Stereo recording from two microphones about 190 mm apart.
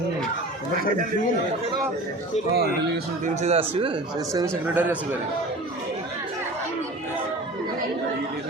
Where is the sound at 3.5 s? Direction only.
30° right (ahead or behind).